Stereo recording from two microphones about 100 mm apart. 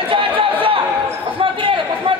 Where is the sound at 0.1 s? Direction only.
60° right (ahead or behind).